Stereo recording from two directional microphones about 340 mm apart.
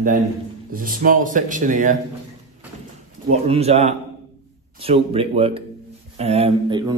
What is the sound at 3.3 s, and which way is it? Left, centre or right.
A man's voice, centre.